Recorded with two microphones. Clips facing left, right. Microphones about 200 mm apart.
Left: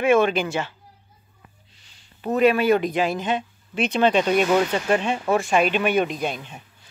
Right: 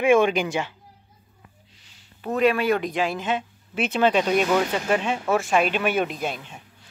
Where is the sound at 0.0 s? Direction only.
15° right (ahead or behind).